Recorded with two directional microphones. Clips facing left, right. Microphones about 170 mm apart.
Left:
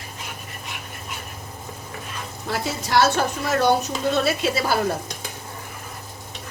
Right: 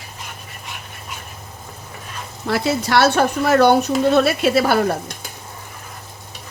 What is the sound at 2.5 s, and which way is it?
Speech, 70° right (ahead or behind).